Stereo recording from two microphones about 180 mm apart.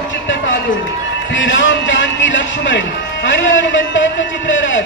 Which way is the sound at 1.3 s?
90° left.